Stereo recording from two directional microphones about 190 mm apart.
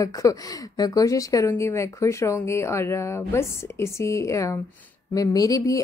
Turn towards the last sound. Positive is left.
turn(degrees=20)  # may be behind; listen again after turning